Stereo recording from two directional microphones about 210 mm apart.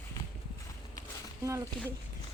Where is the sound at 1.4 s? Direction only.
15° right (ahead or behind).